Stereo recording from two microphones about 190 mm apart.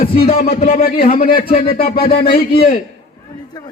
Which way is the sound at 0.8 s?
50° left (ahead or behind).